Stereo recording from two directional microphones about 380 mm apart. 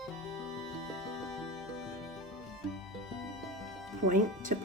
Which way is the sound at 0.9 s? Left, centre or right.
Centre.